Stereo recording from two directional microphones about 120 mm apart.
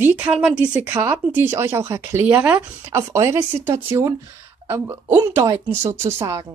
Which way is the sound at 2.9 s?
25° right (ahead or behind).